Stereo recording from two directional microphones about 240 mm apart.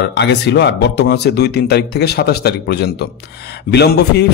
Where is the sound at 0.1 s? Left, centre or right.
Left.